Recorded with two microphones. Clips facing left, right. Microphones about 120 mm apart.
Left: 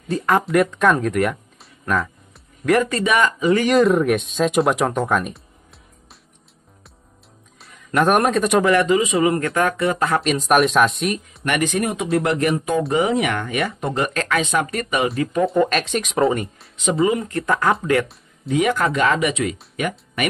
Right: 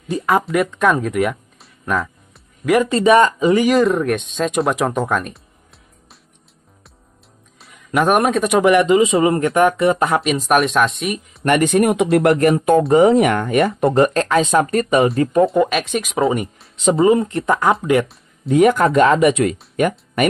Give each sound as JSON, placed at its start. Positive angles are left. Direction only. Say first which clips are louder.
{"t": 0.1, "sound": "speech", "louder": "right 1 dB", "side_deg": 0}
{"t": 2.9, "sound": "speech", "louder": "right 7 dB", "side_deg": -30}
{"t": 3.7, "sound": "speech", "louder": "even", "side_deg": 0}
{"t": 7.6, "sound": "a man's voice", "louder": "right 1 dB", "side_deg": 0}
{"t": 8.6, "sound": "speech", "louder": "right 4 dB", "side_deg": -20}
{"t": 10.2, "sound": "speech", "louder": "right 1 dB", "side_deg": 0}
{"t": 11.4, "sound": "speech", "louder": "right 7 dB", "side_deg": -40}
{"t": 15.4, "sound": "speech", "louder": "right 2 dB", "side_deg": -5}
{"t": 16.8, "sound": "speech", "louder": "right 5 dB", "side_deg": -30}
{"t": 18.5, "sound": "speech", "louder": "right 6 dB", "side_deg": -45}